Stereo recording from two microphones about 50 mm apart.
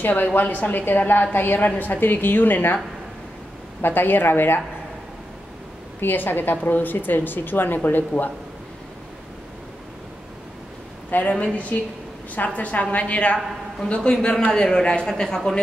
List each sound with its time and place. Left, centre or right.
0.0 s a woman's voice: left
3.8 s a woman's voice: left
5.9 s a woman's voice: left
11.1 s a woman's voice: left
12.4 s a woman's voice: left; by 15.6 s centre